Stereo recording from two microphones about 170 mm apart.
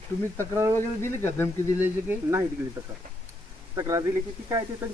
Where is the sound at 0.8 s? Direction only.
15° left (ahead or behind).